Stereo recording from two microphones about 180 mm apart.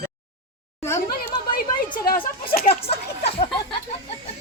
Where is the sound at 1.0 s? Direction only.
55° left (ahead or behind).